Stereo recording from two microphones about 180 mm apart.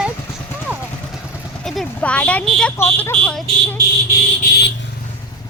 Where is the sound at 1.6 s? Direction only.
Centre (ahead or behind).